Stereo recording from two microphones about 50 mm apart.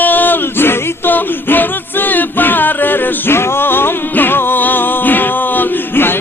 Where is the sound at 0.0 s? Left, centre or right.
Left.